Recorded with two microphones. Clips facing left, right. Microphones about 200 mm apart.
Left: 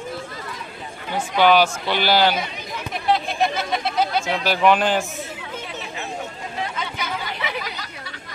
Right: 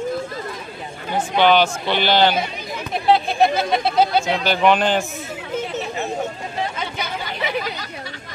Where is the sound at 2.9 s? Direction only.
30° right (ahead or behind).